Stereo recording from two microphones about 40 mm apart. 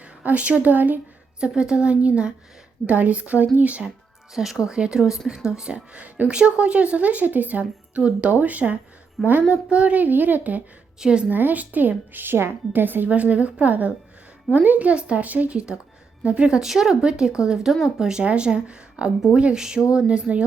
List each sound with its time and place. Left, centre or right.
0.0 s speech: right
1.4 s a woman's voice: right
4.6 s a woman's voice: right
5.5 s a woman's voice: right
8.3 s a woman's voice: right
10.0 s speech: right
11.0 s a woman's voice: right
11.3 s speech: right
12.7 s a woman's voice: right
13.1 s a woman's voice: right
16.6 s a woman's voice: centre
18.2 s a woman's voice: right